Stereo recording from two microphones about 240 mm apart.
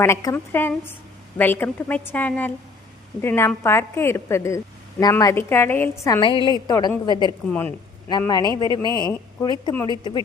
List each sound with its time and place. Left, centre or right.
0.0 s a woman's voice: centre
6.1 s a woman's voice: left
8.7 s a man's voice: centre
9.4 s a woman's voice: centre